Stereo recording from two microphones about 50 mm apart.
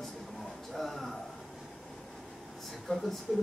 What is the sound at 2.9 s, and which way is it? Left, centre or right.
Speech, centre.